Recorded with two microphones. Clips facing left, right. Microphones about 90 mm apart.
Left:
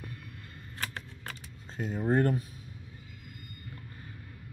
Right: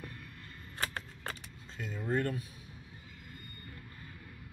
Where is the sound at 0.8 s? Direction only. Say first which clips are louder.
Even; 35° right (ahead or behind).